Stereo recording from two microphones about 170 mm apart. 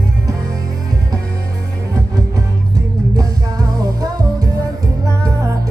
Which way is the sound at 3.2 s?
20° right (ahead or behind).